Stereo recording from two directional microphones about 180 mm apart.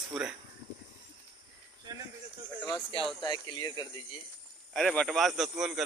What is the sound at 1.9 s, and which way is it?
Speech, 25° right (ahead or behind).